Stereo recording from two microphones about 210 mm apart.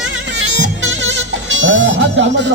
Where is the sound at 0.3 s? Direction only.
60° right (ahead or behind).